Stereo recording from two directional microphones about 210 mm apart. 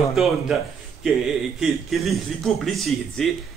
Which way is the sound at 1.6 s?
Centre (ahead or behind).